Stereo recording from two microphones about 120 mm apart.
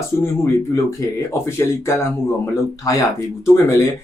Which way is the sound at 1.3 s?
25° left (ahead or behind).